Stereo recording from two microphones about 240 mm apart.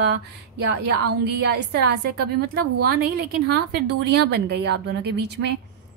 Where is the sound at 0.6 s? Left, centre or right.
Right.